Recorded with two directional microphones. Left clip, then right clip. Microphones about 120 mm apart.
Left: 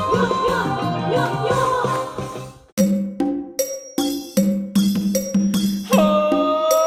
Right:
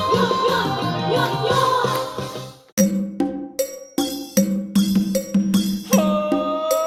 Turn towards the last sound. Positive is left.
turn(degrees=0)  # may be behind; listen again after turning